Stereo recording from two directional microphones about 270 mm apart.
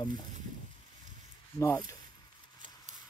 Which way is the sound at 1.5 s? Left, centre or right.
Centre.